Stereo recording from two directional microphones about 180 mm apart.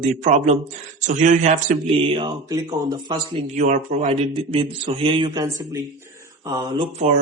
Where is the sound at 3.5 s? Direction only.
45° right (ahead or behind); by 7.0 s 25° right (ahead or behind).